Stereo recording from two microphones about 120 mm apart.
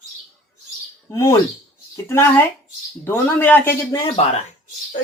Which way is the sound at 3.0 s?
20° left (ahead or behind).